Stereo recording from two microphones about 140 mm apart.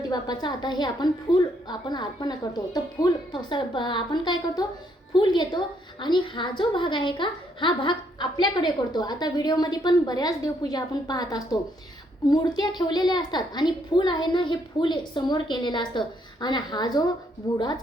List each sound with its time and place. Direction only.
0.1 s a child's voice: 30° left (ahead or behind)